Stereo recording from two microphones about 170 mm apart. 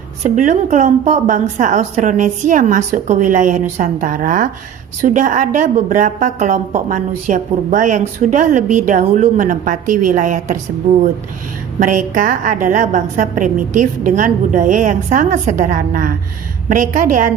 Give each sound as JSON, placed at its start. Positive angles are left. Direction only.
{"t": 0.2, "sound": "a woman's voice", "side_deg": -45}
{"t": 11.8, "sound": "a woman's voice", "side_deg": -50}